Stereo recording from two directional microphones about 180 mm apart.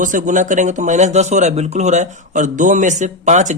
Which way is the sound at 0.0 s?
45° right (ahead or behind).